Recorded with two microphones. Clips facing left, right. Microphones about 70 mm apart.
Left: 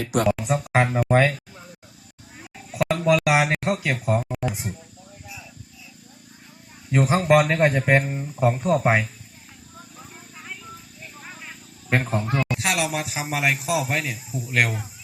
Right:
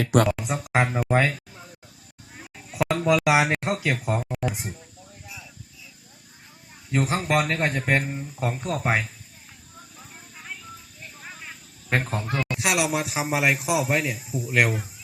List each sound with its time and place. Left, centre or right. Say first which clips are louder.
0.0 s speech: right 3 dB; right
0.3 s speech: left 4 dB; centre
2.4 s a sound: left 1 dB; centre
3.2 s speech: even; centre
5.2 s a sound: left 2 dB; centre
6.9 s speech: left 5 dB; centre
10.0 s snake: left 2 dB; centre
11.0 s speech: even; centre